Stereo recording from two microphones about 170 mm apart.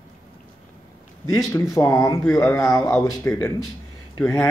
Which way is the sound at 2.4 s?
5° left (ahead or behind).